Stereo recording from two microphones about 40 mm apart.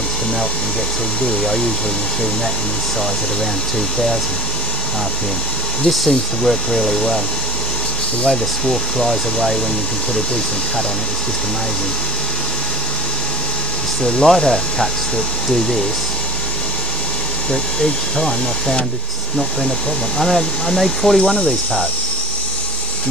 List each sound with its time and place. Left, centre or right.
1.2 s speech: centre
5.9 s speech: centre
8.3 s speech: centre
14.2 s speech: centre
17.5 s speech: centre
20.2 s speech: centre
21.4 s speech: left